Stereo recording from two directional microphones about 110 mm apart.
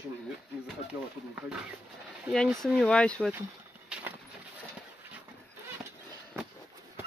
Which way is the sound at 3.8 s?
10° right (ahead or behind).